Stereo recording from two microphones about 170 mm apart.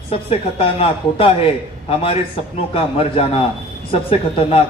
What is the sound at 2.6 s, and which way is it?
A man's voice, 35° left (ahead or behind).